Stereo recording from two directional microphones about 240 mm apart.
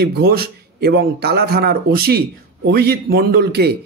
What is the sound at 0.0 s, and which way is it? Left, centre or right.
A man's voice, right.